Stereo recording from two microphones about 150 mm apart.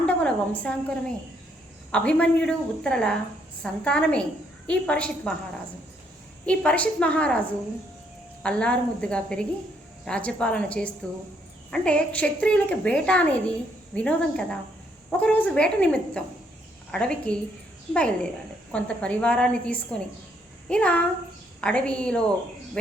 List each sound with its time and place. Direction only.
0.0 s a sound: 5° left (ahead or behind)
1.9 s a woman's voice: 10° left (ahead or behind)
6.4 s a woman's voice: 10° left (ahead or behind)
8.4 s a woman's voice: 5° left (ahead or behind)